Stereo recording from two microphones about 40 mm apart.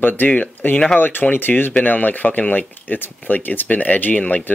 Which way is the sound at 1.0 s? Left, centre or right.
Left.